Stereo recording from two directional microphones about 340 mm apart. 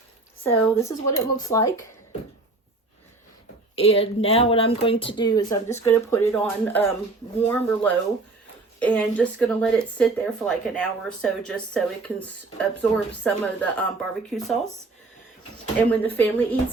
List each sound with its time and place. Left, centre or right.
0.4 s speech: centre
3.8 s speech: centre
15.9 s speech: centre